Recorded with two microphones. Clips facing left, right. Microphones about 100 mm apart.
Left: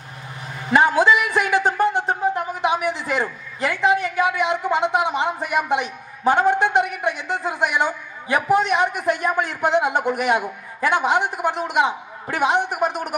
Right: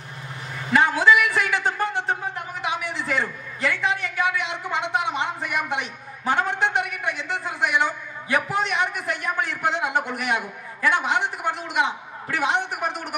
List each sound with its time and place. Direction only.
0.7 s a man's voice: 20° left (ahead or behind)